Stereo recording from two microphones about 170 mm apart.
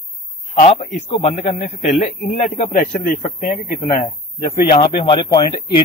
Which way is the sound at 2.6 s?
55° left (ahead or behind).